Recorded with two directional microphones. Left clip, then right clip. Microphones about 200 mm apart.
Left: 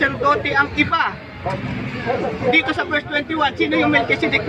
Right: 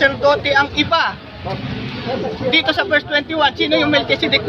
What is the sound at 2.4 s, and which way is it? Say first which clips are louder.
A man's voice: right 3 dB; 30° right (ahead or behind).